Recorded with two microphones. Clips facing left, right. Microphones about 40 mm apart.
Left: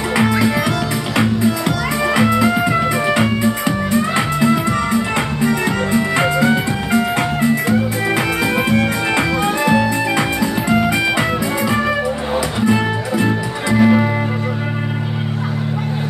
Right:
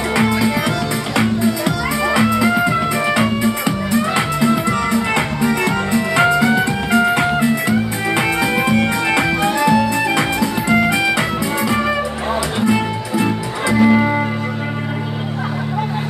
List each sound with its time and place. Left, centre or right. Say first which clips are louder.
0.1 s music: left 1 dB; centre
2.1 s music: even; centre
7.0 s music: right 4 dB; centre
9.6 s music: right 1 dB; centre
10.7 s music: right 1 dB; centre